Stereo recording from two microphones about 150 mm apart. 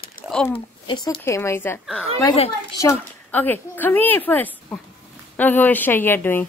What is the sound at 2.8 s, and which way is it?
A woman's voice, 15° left (ahead or behind).